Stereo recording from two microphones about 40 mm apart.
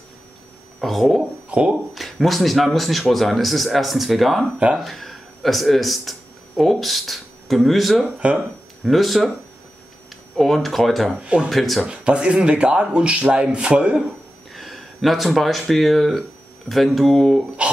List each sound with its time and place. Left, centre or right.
0.7 s speech: centre
1.5 s speech: right
2.0 s speech: centre
10.3 s speech: centre
11.1 s speech: right
11.5 s speech: centre
11.9 s speech: right
14.5 s speech: centre
17.6 s speech: right